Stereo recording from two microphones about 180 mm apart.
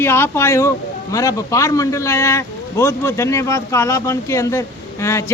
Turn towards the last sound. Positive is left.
turn(degrees=15)  # may be behind; listen again after turning